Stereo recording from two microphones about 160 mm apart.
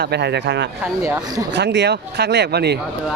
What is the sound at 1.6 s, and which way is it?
Speech, 90° right.